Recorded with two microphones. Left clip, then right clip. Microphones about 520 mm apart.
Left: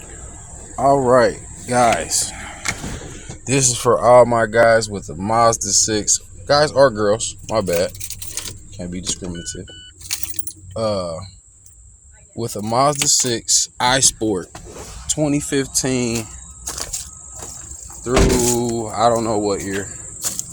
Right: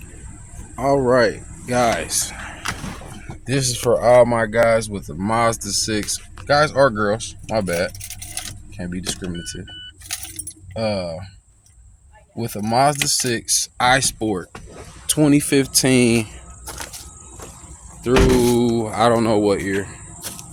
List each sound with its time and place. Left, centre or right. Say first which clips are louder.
0.8 s speech: left 3 dB; right
3.4 s speech: left 3 dB; right
10.8 s speech: left 2 dB; right
12.4 s speech: even; right
15.0 s speech: right 3 dB; right
18.0 s speech: right 1 dB; right